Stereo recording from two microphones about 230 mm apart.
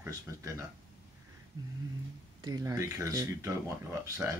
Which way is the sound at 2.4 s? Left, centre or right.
Centre.